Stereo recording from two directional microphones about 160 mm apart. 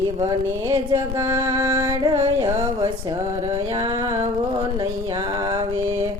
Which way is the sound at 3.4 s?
35° right (ahead or behind).